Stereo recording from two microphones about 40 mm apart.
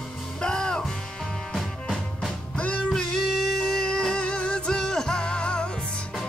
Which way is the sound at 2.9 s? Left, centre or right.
Centre.